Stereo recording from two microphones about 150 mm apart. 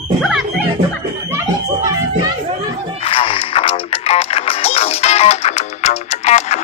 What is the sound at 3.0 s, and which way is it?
Music, 40° left (ahead or behind).